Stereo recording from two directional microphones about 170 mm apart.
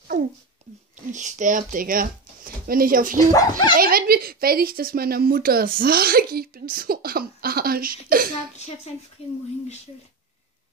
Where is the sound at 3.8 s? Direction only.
60° right (ahead or behind).